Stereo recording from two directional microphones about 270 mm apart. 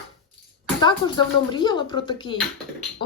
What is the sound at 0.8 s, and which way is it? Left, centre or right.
A woman's voice, centre.